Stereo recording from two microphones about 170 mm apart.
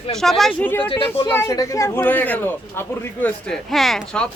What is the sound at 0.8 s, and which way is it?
Speech, 30° left (ahead or behind).